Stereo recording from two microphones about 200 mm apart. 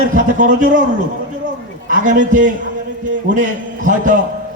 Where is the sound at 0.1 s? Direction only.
40° right (ahead or behind).